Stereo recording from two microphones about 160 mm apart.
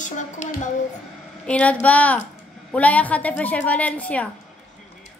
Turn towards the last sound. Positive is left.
turn(degrees=10)  # may be behind; listen again after turning